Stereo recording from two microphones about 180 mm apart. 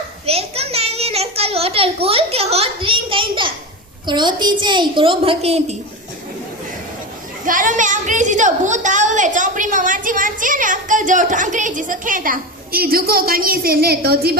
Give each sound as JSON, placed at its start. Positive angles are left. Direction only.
{"t": 0.3, "sound": "a sound", "side_deg": -35}
{"t": 4.0, "sound": "a woman's voice", "side_deg": -25}
{"t": 7.4, "sound": "a woman's voice", "side_deg": -45}